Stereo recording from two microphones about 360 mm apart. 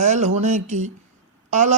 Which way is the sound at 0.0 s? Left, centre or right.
Centre.